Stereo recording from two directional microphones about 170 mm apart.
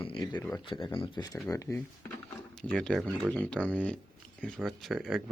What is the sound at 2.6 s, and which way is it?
Speech, 5° left (ahead or behind).